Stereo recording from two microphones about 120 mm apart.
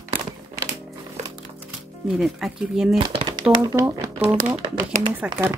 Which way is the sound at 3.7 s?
25° right (ahead or behind).